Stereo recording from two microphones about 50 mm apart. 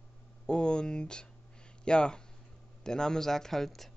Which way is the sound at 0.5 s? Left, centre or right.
Centre.